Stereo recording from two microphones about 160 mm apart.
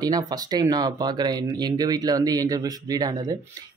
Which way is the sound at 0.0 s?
25° right (ahead or behind).